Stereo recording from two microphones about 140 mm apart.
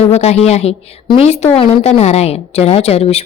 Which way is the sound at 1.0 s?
40° left (ahead or behind).